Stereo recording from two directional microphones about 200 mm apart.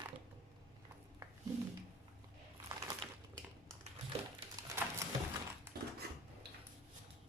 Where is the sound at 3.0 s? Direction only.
25° right (ahead or behind).